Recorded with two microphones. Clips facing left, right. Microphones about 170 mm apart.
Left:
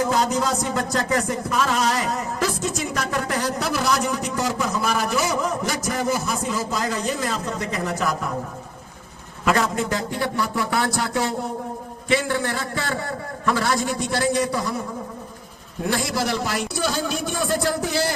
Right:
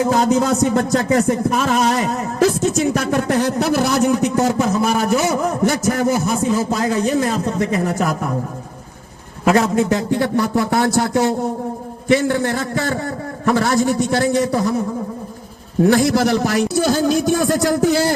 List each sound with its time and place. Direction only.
0.1 s a man's voice: 50° right (ahead or behind)
9.4 s a man's voice: 50° right (ahead or behind)
15.9 s a man's voice: 50° right (ahead or behind)